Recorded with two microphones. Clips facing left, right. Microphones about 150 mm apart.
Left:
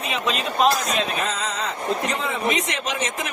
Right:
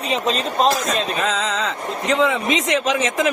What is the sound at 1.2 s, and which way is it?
A man's voice, 90° right.